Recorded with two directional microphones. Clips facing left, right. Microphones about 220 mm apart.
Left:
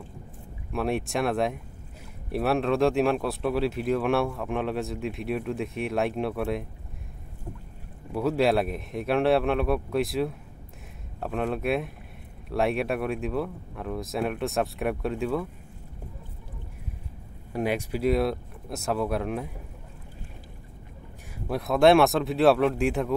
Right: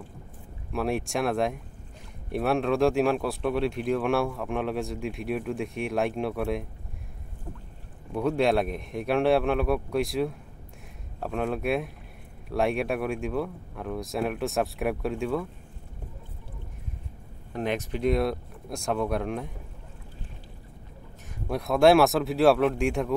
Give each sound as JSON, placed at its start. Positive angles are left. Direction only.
{"t": 0.7, "sound": "speech", "side_deg": 0}
{"t": 8.1, "sound": "speech", "side_deg": 5}
{"t": 17.5, "sound": "speech", "side_deg": 10}
{"t": 21.5, "sound": "speech", "side_deg": 0}